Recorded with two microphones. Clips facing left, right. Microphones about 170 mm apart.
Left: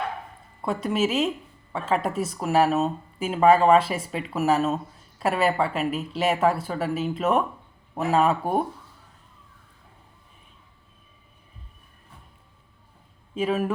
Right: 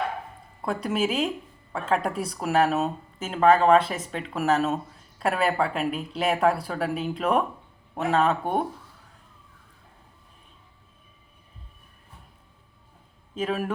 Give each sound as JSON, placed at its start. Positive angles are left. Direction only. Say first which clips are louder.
{"t": 0.6, "sound": "speech", "louder": "left 2 dB", "side_deg": 0}
{"t": 13.3, "sound": "speech", "louder": "left 3 dB", "side_deg": 5}